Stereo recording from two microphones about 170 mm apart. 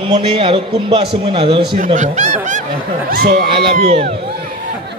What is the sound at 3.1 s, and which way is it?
Speech, 65° right (ahead or behind).